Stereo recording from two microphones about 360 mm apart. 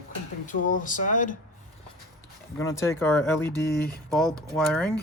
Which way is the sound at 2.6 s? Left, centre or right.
Centre.